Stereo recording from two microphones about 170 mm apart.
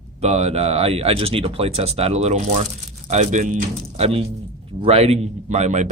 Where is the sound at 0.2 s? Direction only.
40° right (ahead or behind).